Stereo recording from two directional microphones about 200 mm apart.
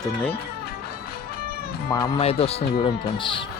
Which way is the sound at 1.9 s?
20° left (ahead or behind).